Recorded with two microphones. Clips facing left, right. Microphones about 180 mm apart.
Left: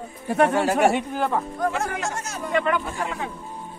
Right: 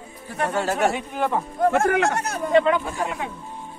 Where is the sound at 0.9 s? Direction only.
Centre (ahead or behind).